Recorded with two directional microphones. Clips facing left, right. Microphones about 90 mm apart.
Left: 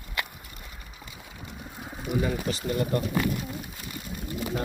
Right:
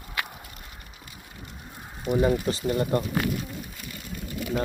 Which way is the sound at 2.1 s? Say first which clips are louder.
Right 5 dB; 30° right (ahead or behind).